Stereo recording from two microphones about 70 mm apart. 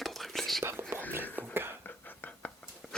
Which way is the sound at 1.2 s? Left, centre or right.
Left.